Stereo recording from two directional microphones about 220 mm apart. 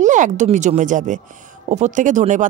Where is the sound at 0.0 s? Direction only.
35° right (ahead or behind).